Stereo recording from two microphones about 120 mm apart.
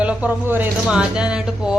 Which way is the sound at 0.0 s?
10° right (ahead or behind).